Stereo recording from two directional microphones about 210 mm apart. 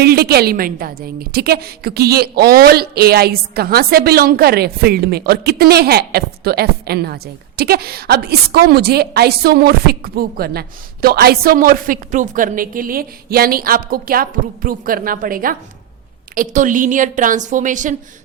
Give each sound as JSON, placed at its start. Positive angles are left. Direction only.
{"t": 0.0, "sound": "a woman's voice", "side_deg": -50}